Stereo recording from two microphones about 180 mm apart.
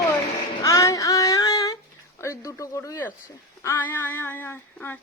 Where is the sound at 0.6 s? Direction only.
20° left (ahead or behind).